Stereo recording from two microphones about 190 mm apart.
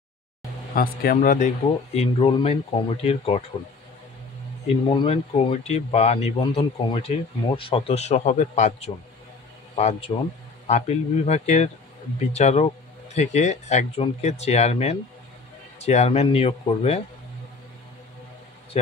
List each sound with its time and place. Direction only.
0.7 s speech: 45° left (ahead or behind)
2.0 s speech: 30° left (ahead or behind)
4.8 s speech: 30° left (ahead or behind)